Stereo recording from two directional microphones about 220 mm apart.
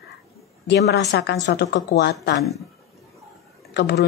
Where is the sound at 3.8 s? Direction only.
50° left (ahead or behind).